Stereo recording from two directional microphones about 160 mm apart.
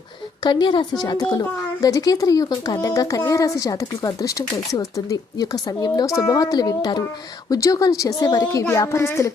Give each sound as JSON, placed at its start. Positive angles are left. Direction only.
{"t": 0.4, "sound": "speech", "side_deg": 25}